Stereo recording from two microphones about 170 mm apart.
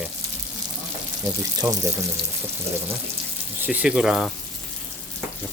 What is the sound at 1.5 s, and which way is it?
Speech, 20° right (ahead or behind).